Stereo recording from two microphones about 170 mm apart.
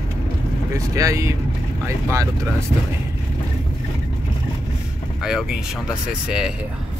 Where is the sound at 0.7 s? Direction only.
20° right (ahead or behind).